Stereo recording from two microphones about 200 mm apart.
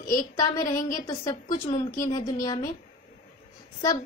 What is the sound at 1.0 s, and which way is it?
A woman's voice, 15° left (ahead or behind).